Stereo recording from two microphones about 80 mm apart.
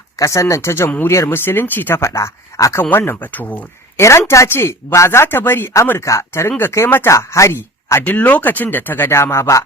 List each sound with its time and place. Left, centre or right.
0.2 s speech: left
2.9 s speech: left
3.9 s speech: left
7.1 s speech: left
8.0 s speech: centre; by 9.6 s left